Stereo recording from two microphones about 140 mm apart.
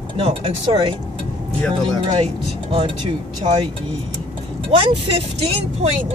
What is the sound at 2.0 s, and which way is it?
Speech, 45° right (ahead or behind).